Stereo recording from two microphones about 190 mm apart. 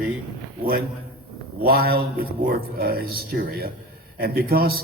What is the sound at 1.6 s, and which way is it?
Speech, 55° right (ahead or behind).